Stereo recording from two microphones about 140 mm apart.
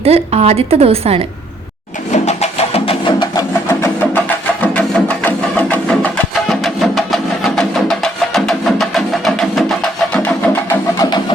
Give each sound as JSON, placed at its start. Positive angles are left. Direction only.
{"t": 0.0, "sound": "a woman's voice", "side_deg": -45}
{"t": 2.1, "sound": "music", "side_deg": 50}
{"t": 3.7, "sound": "music", "side_deg": 20}